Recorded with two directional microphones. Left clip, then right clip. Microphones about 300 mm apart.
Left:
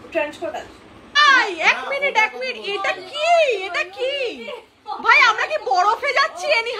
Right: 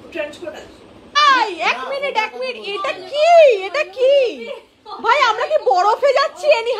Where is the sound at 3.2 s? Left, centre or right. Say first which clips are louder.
Right 7 dB; centre.